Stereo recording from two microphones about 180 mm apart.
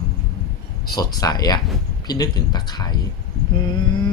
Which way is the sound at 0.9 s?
20° left (ahead or behind).